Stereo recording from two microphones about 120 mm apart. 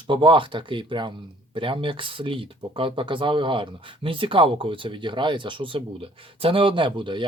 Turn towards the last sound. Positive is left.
turn(degrees=-45)  # may be behind; listen again after turning